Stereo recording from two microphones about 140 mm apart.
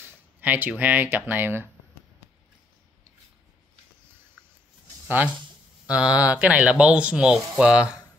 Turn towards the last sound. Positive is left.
turn(degrees=-5)  # may be behind; listen again after turning